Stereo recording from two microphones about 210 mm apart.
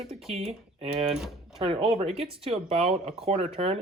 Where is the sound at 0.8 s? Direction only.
30° right (ahead or behind).